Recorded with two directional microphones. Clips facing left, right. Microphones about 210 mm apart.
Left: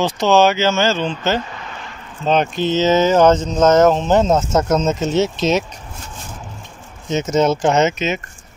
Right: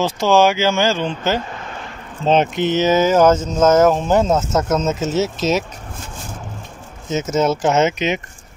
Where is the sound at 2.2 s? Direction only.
25° right (ahead or behind); by 5.6 s 5° right (ahead or behind).